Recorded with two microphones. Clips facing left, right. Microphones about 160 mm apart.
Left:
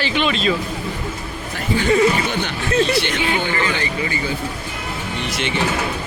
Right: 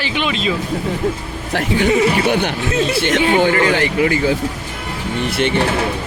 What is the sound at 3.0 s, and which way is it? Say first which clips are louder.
Speech: right 6 dB; 45° right (ahead or behind).